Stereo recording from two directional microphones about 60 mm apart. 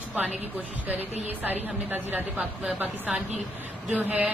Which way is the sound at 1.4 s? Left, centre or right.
Right.